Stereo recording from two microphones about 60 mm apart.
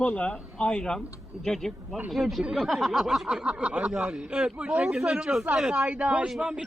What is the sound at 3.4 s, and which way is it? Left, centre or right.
Speech, centre.